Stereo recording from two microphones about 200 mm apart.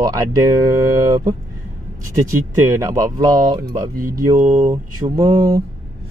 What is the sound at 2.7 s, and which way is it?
Speech, 15° right (ahead or behind).